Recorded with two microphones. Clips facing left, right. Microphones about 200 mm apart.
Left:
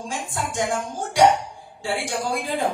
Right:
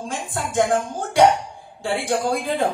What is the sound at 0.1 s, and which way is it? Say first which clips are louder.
Speech: right 3 dB; 55° right (ahead or behind).